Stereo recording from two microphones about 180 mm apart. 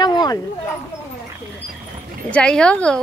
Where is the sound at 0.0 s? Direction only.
25° left (ahead or behind).